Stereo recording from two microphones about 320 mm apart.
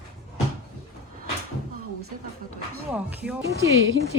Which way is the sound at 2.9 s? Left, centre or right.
Centre.